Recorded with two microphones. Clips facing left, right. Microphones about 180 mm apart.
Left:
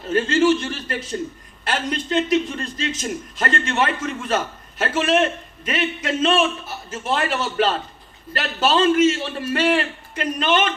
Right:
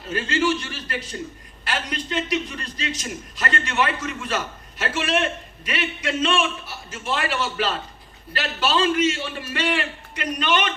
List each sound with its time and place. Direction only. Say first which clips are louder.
0.1 s a man's voice: left 6 dB; 45° left (ahead or behind)